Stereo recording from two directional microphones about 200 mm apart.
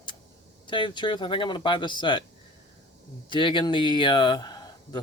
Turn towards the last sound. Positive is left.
turn(degrees=20)  # may be behind; listen again after turning